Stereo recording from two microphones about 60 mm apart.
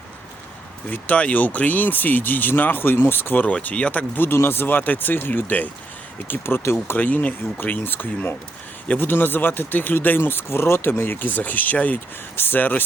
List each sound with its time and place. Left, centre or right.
0.9 s speech: left
4.3 s speech: left
6.8 s speech: left